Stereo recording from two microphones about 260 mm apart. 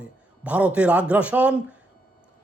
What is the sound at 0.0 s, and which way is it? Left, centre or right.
A man's voice, centre.